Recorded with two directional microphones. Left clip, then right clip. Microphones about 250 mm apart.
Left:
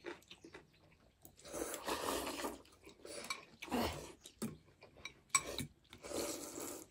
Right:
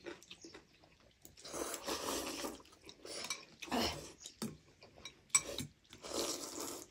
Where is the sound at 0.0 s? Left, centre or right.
Centre.